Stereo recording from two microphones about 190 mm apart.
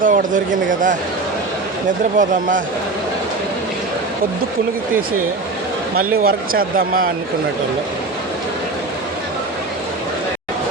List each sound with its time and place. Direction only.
0.0 s speech: 45° right (ahead or behind)
2.1 s speech: 45° right (ahead or behind)
6.2 s speech: 50° right (ahead or behind)